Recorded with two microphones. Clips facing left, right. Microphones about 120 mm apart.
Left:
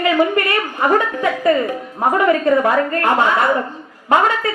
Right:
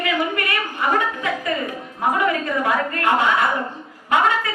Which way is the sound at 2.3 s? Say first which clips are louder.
Left 7 dB; 40° left (ahead or behind).